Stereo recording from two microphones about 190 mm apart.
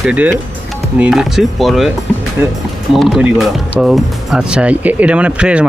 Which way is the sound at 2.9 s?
Centre (ahead or behind).